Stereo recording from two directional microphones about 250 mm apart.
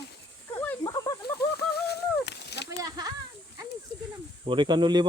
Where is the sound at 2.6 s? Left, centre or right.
Centre.